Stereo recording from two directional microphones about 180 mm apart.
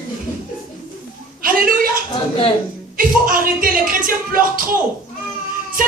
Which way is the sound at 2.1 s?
30° left (ahead or behind).